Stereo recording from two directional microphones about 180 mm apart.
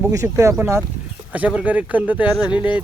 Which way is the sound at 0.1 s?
15° right (ahead or behind).